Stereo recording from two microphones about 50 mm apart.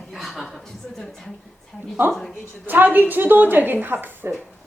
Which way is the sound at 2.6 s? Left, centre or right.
Right.